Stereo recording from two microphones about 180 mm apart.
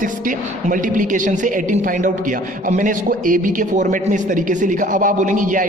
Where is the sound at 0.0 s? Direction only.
50° right (ahead or behind).